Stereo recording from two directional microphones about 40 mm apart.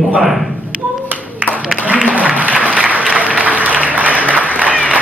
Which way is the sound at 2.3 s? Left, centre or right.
Right.